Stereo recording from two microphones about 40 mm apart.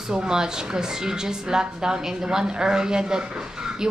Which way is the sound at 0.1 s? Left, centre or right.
Centre.